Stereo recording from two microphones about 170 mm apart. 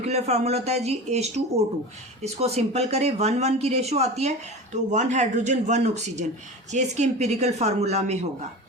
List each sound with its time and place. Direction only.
0.0 s speech: 40° right (ahead or behind)